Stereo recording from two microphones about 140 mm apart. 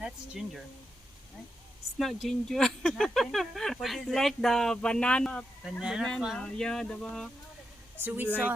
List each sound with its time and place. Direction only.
0.0 s speech: 5° right (ahead or behind)
2.0 s speech: centre (ahead or behind)
5.8 s speech: 5° right (ahead or behind)
7.9 s a woman's voice: 15° right (ahead or behind)